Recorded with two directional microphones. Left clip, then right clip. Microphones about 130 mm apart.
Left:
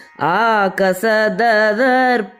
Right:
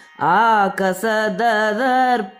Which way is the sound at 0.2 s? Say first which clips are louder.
Even; 20° left (ahead or behind).